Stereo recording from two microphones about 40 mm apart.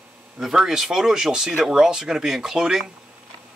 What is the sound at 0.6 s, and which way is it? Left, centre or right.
Speech, centre.